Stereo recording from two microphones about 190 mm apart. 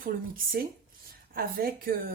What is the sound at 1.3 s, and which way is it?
Speech, 50° right (ahead or behind).